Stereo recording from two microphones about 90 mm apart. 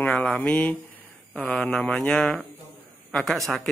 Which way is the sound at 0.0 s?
15° left (ahead or behind).